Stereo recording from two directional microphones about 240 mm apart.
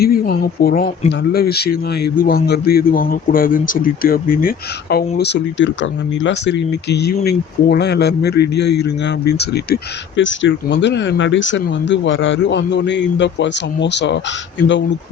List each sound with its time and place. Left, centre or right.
0.0 s speech: left